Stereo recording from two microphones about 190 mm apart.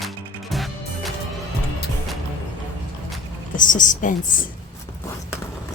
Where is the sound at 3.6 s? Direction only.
45° left (ahead or behind).